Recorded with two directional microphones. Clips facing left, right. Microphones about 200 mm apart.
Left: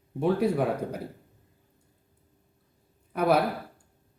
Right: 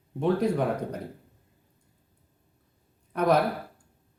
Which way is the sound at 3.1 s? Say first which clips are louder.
Even; 5° left (ahead or behind).